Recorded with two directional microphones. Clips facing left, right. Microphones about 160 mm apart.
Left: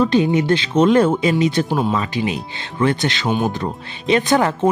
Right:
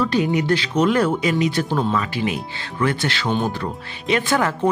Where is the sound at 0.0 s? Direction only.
25° left (ahead or behind).